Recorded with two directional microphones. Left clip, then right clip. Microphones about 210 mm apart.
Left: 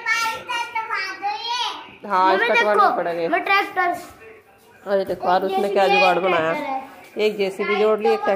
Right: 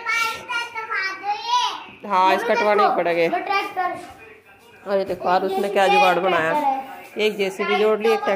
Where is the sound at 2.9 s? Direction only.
20° right (ahead or behind).